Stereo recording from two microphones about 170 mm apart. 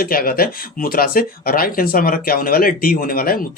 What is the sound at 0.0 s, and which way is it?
Speech, 60° left (ahead or behind).